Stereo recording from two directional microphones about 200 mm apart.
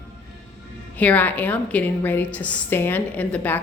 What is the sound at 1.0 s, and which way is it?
A woman's voice, 10° left (ahead or behind).